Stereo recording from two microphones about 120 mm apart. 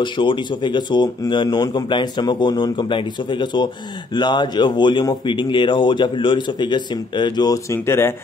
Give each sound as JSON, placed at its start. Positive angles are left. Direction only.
{"t": 0.0, "sound": "speech", "side_deg": 40}